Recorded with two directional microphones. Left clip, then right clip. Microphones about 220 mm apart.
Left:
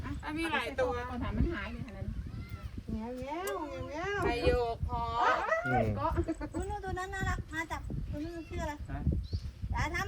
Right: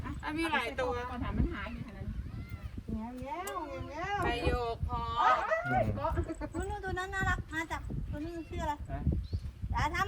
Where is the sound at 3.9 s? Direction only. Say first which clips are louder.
Even; 25° right (ahead or behind).